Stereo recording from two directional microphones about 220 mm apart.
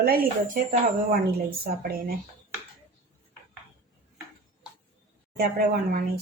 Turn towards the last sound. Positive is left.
turn(degrees=-45)  # may be behind; listen again after turning